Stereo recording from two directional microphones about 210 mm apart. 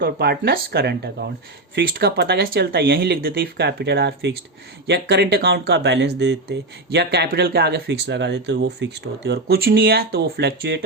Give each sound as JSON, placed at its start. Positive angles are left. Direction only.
{"t": 0.0, "sound": "speech", "side_deg": -50}